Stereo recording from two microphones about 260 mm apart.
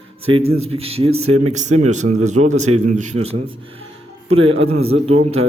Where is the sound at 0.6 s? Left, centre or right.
Right.